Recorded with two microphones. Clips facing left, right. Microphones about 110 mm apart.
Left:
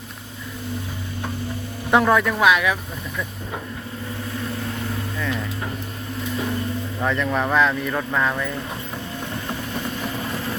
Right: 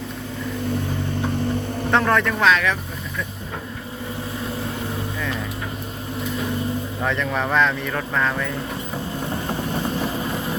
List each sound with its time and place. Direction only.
1.9 s speech: 10° left (ahead or behind)
7.0 s speech: centre (ahead or behind)
9.3 s vehicle: 30° right (ahead or behind)